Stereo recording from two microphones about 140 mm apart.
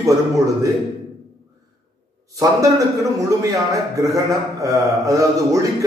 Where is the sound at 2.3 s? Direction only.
25° right (ahead or behind).